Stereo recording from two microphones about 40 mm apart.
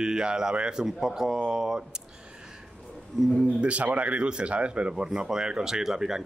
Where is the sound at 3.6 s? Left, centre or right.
Right.